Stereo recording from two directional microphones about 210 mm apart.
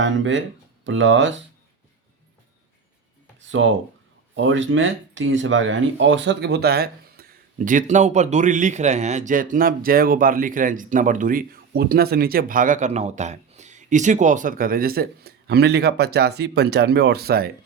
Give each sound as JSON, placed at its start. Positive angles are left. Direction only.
{"t": 0.0, "sound": "speech", "side_deg": -60}
{"t": 3.4, "sound": "a sound", "side_deg": -65}
{"t": 4.4, "sound": "speech", "side_deg": -65}